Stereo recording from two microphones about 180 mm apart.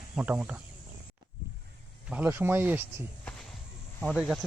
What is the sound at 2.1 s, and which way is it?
Speech, 10° right (ahead or behind).